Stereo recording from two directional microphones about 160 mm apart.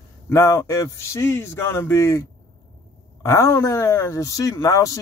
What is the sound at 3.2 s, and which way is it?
Speech, 20° left (ahead or behind).